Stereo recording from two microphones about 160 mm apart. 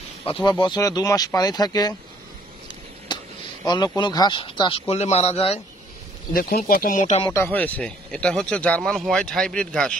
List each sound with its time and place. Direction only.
0.2 s speech: 30° left (ahead or behind)
3.1 s a sound: 30° left (ahead or behind)
3.6 s speech: 25° left (ahead or behind)
6.3 s speech: 65° left (ahead or behind)
7.5 s speech: 10° left (ahead or behind)